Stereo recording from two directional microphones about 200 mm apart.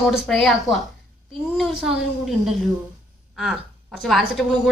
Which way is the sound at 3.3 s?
Centre (ahead or behind).